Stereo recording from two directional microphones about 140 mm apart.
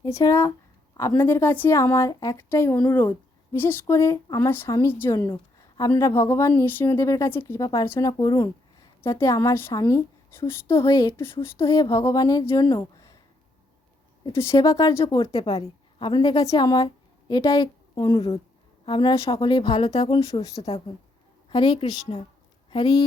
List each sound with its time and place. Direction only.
0.1 s a woman's voice: 20° left (ahead or behind)
14.3 s speech: 25° left (ahead or behind)
15.0 s a woman's voice: 40° left (ahead or behind)
19.9 s speech: 45° left (ahead or behind)
21.5 s a woman's voice: 35° left (ahead or behind)